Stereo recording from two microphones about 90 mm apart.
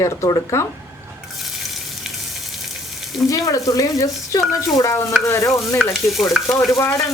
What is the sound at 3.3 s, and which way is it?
A woman's voice, 40° left (ahead or behind).